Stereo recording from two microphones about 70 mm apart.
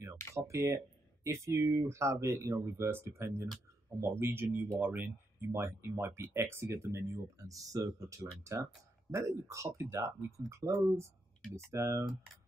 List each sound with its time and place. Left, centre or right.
0.3 s speech: right
4.6 s speech: right
5.5 s speech: right